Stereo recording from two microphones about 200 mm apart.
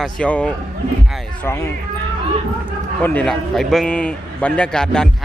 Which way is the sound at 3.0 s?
5° left (ahead or behind).